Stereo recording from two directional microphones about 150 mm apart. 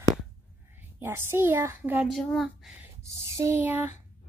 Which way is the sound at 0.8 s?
15° right (ahead or behind).